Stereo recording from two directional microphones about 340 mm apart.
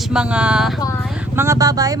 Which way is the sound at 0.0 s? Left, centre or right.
Centre.